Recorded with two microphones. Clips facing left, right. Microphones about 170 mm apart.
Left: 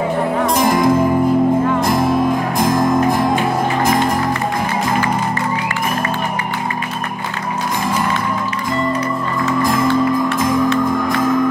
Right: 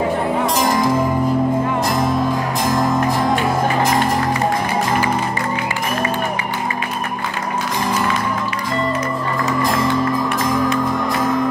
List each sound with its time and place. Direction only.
0.5 s music: 50° left (ahead or behind)
9.6 s music: 50° left (ahead or behind)